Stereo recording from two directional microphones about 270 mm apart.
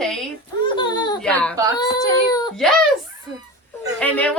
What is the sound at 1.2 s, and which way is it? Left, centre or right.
A woman's voice, centre.